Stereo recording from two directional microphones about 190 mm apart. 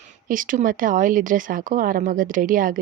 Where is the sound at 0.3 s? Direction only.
45° right (ahead or behind).